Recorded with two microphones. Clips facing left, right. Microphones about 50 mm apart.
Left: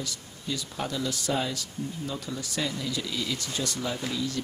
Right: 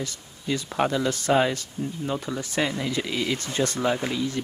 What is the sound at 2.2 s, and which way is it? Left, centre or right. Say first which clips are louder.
Speech: right 5 dB; right.